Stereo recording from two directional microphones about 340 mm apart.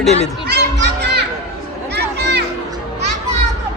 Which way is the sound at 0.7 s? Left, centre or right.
Right.